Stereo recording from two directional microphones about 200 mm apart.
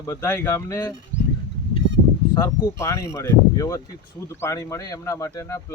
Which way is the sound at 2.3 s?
15° left (ahead or behind).